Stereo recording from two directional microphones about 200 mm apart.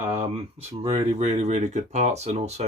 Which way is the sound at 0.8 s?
30° right (ahead or behind).